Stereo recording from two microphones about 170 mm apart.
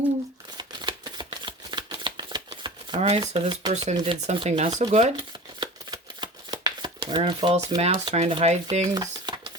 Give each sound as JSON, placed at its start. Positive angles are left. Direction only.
{"t": 0.5, "sound": "shuffling cards", "side_deg": -25}
{"t": 3.2, "sound": "speech", "side_deg": -30}
{"t": 3.7, "sound": "speech", "side_deg": -40}
{"t": 5.5, "sound": "shuffling cards", "side_deg": -25}
{"t": 8.1, "sound": "speech", "side_deg": -40}
{"t": 9.0, "sound": "stir", "side_deg": -25}